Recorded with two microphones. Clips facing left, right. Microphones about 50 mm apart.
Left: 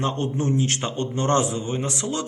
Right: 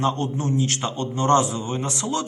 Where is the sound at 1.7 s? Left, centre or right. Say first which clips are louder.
Right 1 dB; centre.